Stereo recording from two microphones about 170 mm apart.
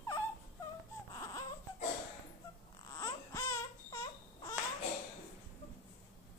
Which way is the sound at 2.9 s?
20° left (ahead or behind).